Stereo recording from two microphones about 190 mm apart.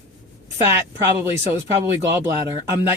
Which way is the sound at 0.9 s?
15° right (ahead or behind).